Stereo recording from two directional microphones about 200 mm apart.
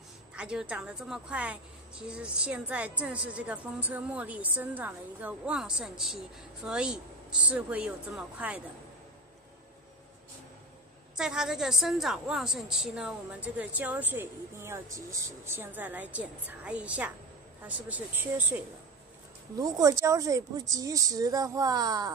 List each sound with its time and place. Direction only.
0.3 s a woman's voice: 5° right (ahead or behind)
11.1 s a woman's voice: 5° right (ahead or behind)
19.6 s a woman's voice: 15° right (ahead or behind)